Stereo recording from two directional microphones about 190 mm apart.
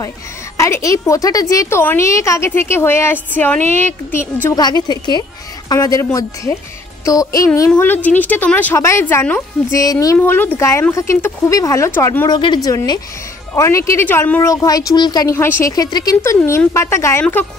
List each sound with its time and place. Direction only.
0.6 s a woman's voice: 15° left (ahead or behind)
7.1 s a woman's voice: 15° left (ahead or behind)